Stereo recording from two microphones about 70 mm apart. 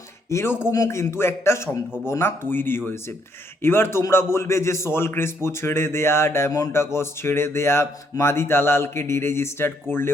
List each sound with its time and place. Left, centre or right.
0.3 s a man's voice: left
6.5 s speech: left
6.9 s a man's voice: left